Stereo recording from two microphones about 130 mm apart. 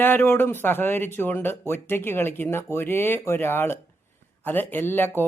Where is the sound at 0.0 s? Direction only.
15° left (ahead or behind).